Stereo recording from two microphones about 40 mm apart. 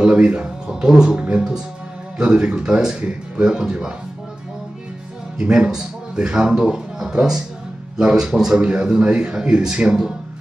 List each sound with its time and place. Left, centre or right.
0.0 s speech: right
0.7 s speech: centre
5.4 s a man's voice: right